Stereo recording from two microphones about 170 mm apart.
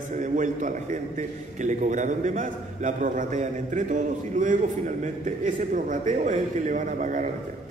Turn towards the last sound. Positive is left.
turn(degrees=-50)  # may be behind; listen again after turning